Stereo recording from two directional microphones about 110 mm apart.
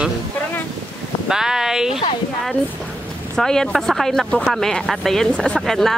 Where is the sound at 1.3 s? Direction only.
5° right (ahead or behind).